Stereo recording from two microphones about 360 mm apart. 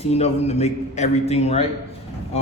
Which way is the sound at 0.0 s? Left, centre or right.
Centre.